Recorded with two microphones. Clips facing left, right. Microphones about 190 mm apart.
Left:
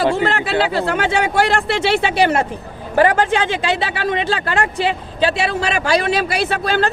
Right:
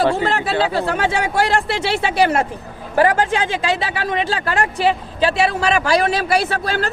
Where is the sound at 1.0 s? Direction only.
25° left (ahead or behind).